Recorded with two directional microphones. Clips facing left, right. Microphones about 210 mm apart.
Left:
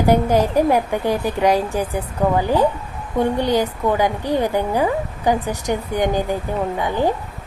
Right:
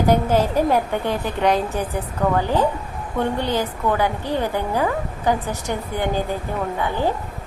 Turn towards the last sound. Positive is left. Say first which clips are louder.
# left 3 dB
turn(degrees=15)  # may be behind; listen again after turning